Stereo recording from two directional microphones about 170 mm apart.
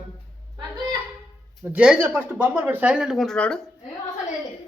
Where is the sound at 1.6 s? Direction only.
5° right (ahead or behind).